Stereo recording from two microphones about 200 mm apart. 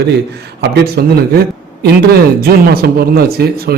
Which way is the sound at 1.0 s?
55° right (ahead or behind).